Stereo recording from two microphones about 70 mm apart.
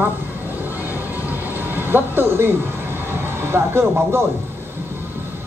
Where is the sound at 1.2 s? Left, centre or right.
Right.